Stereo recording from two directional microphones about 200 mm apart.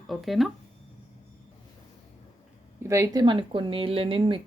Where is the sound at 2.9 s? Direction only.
15° right (ahead or behind).